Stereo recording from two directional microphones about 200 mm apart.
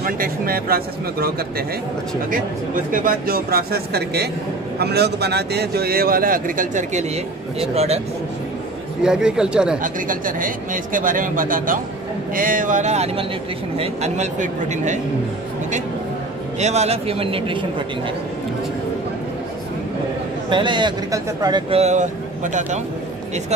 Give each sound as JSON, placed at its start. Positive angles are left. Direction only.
{"t": 0.0, "sound": "a man's voice", "side_deg": -45}
{"t": 2.3, "sound": "a man's voice", "side_deg": -45}
{"t": 9.0, "sound": "speech", "side_deg": -5}
{"t": 9.8, "sound": "a man's voice", "side_deg": -40}
{"t": 16.5, "sound": "speech", "side_deg": -35}
{"t": 20.4, "sound": "speech", "side_deg": -25}